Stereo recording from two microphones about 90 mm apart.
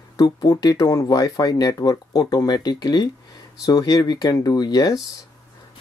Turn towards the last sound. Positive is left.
turn(degrees=45)  # may be behind; listen again after turning